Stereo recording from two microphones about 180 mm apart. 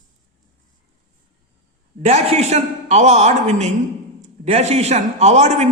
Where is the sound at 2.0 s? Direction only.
35° right (ahead or behind).